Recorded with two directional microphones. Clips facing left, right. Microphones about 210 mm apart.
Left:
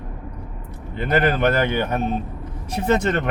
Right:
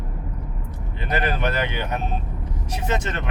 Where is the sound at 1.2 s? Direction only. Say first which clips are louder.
Left 5 dB; 55° left (ahead or behind).